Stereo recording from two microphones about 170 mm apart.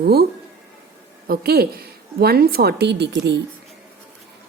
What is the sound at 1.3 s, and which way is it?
A woman's voice, 65° right (ahead or behind).